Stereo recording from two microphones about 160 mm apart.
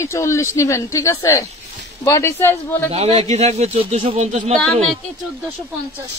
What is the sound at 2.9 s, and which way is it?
Speech, 40° right (ahead or behind).